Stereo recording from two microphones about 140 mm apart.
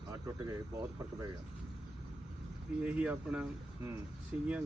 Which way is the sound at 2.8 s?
10° right (ahead or behind).